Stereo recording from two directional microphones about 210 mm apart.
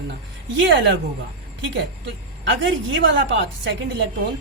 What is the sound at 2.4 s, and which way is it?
Speech, 60° right (ahead or behind).